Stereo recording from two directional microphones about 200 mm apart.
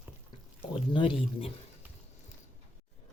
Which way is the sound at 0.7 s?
25° left (ahead or behind).